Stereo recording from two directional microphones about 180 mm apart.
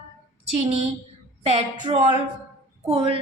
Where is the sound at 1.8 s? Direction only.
25° right (ahead or behind).